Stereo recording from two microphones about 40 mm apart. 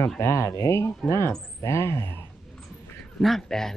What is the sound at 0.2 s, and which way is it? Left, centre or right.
Speech, left.